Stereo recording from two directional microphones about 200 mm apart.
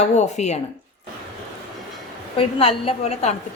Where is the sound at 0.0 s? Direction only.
35° left (ahead or behind).